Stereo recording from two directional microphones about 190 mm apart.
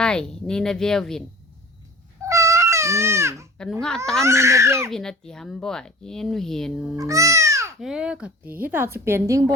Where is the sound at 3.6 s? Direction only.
5° left (ahead or behind).